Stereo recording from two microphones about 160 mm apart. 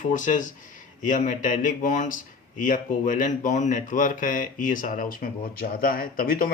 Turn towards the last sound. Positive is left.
turn(degrees=65)  # may be behind; listen again after turning